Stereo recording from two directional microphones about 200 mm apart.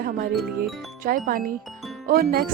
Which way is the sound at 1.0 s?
45° right (ahead or behind).